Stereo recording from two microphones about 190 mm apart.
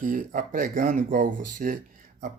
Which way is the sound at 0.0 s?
45° right (ahead or behind).